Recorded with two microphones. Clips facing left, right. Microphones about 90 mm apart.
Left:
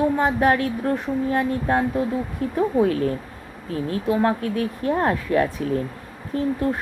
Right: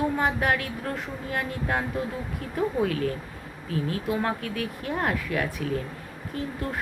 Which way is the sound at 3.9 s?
30° left (ahead or behind).